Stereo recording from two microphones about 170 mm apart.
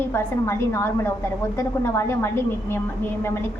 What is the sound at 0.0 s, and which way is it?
A woman's voice, 15° left (ahead or behind).